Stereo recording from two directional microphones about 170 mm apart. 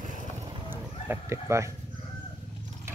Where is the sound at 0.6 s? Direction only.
10° right (ahead or behind).